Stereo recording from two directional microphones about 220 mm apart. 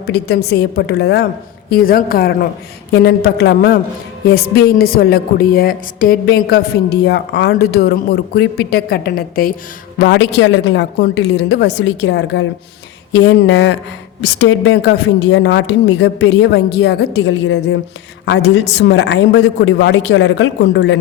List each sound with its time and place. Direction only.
0.0 s a woman's voice: 50° left (ahead or behind)